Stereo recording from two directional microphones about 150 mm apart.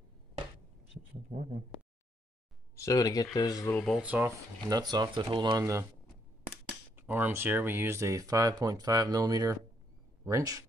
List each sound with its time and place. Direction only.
1.3 s speech: 40° right (ahead or behind)
2.7 s speech: 20° left (ahead or behind)
3.7 s speech: 5° left (ahead or behind)
4.0 s speech: 10° right (ahead or behind)
4.6 s speech: 25° right (ahead or behind)
7.0 s speech: 10° right (ahead or behind)